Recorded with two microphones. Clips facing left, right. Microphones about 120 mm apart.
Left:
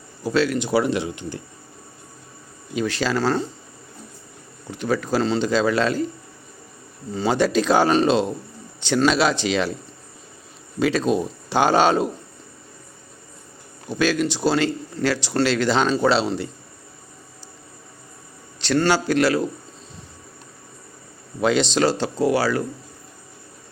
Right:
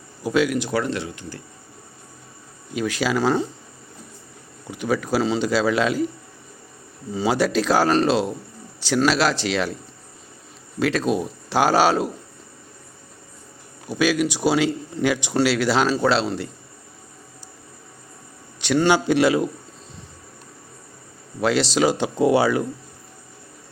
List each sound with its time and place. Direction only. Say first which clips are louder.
0.2 s speech: even; 10° right (ahead or behind)
0.7 s speech: left 4 dB; 10° left (ahead or behind)
2.7 s speech: even; 5° right (ahead or behind)
4.7 s speech: even; 10° right (ahead or behind)
7.1 s speech: left 1 dB; 10° right (ahead or behind)
10.8 s speech: left 1 dB; centre (ahead or behind)
13.8 s speech: right 1 dB; 10° right (ahead or behind)
18.6 s speech: right 1 dB; 15° right (ahead or behind)
21.4 s speech: even; centre (ahead or behind); by 22.6 s 20° right (ahead or behind)